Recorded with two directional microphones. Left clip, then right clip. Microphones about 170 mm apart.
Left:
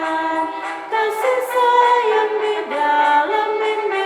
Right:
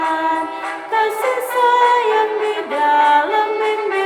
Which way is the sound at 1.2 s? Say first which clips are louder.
Even; 20° right (ahead or behind).